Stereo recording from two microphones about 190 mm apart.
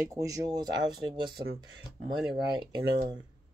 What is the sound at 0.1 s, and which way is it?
Speech, 15° right (ahead or behind).